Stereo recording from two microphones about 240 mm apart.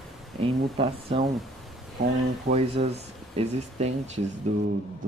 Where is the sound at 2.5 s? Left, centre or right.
Right.